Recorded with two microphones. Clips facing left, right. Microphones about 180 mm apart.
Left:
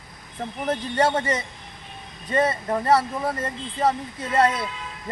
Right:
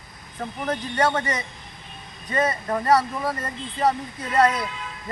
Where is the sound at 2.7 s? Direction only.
25° left (ahead or behind).